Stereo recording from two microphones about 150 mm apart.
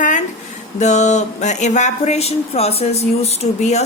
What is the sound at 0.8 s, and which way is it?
Speech, 50° left (ahead or behind).